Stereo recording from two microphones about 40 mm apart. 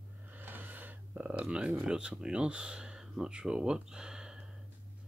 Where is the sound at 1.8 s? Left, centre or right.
Right.